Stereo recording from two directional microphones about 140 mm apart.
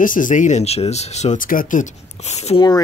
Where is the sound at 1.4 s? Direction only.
80° left; by 2.6 s 50° left (ahead or behind).